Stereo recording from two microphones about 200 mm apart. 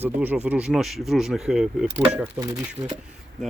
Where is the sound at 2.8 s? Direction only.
30° right (ahead or behind).